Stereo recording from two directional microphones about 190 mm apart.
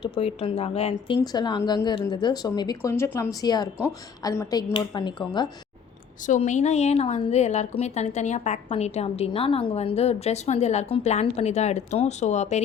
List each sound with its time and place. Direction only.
0.2 s a woman's voice: 30° left (ahead or behind)
6.2 s a woman's voice: 40° left (ahead or behind)